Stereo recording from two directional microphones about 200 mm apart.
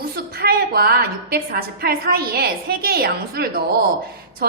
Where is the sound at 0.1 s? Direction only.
50° right (ahead or behind).